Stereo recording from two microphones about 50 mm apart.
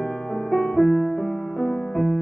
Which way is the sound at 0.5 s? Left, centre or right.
Centre.